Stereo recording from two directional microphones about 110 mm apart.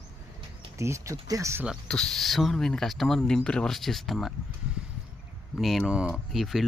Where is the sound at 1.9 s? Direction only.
5° left (ahead or behind).